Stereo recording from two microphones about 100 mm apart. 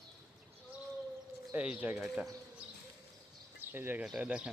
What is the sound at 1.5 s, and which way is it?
Speech, 15° right (ahead or behind).